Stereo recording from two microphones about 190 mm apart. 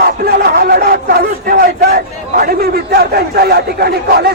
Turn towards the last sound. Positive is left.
turn(degrees=-55)  # may be behind; listen again after turning